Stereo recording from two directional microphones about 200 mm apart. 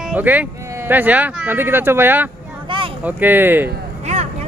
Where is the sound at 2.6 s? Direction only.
25° right (ahead or behind).